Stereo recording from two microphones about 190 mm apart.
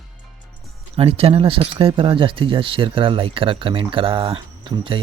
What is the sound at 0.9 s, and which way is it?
Speech, 30° right (ahead or behind).